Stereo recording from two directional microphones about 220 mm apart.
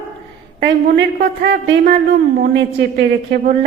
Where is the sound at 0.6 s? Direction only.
50° right (ahead or behind).